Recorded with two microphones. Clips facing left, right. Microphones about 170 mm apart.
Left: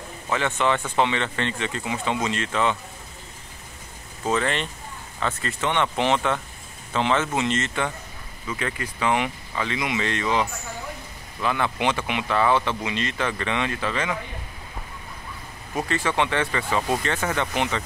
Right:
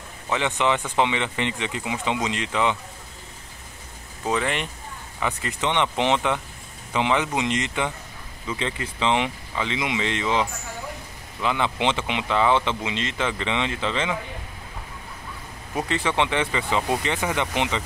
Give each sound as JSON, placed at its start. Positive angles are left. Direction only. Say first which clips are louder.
{"t": 0.3, "sound": "speech", "louder": "even", "side_deg": -15}
{"t": 4.3, "sound": "speech", "louder": "left 1 dB", "side_deg": -15}
{"t": 15.7, "sound": "speech", "louder": "even", "side_deg": -20}